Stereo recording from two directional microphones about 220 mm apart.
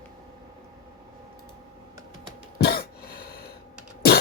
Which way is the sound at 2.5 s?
45° left (ahead or behind).